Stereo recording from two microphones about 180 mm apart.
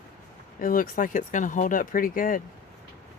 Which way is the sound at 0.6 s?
50° left (ahead or behind).